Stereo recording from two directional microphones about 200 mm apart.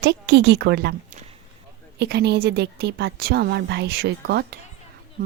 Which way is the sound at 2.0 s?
55° right (ahead or behind).